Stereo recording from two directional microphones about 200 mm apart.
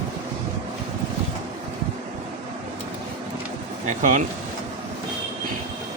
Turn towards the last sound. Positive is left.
turn(degrees=-40)  # may be behind; listen again after turning